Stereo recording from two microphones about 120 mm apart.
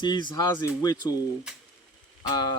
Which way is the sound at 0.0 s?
40° left (ahead or behind).